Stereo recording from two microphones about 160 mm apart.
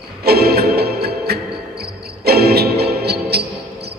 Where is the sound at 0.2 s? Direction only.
75° right (ahead or behind).